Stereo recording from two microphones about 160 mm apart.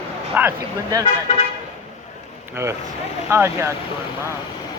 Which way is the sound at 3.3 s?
15° right (ahead or behind).